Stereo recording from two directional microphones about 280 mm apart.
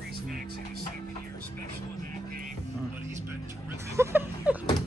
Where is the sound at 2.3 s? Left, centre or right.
Right.